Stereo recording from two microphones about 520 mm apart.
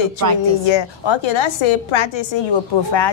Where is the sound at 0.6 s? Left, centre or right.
Left.